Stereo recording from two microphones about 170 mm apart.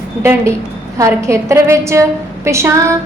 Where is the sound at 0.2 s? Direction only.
15° right (ahead or behind).